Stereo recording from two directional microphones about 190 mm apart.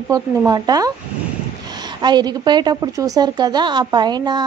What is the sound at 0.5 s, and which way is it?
A woman's voice, 20° right (ahead or behind).